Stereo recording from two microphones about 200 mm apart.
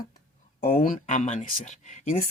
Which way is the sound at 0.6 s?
45° left (ahead or behind).